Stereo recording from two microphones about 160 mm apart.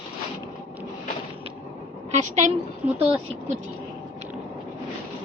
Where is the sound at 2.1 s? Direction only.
50° right (ahead or behind).